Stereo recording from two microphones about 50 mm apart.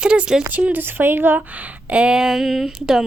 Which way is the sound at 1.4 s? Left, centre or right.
Right.